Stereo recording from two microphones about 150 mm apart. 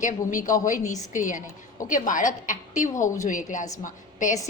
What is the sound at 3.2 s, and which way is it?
A woman's voice, 60° left (ahead or behind).